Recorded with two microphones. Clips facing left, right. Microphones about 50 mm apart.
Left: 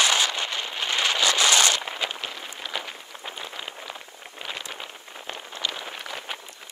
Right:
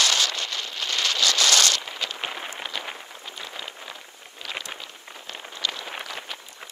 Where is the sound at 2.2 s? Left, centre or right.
Right.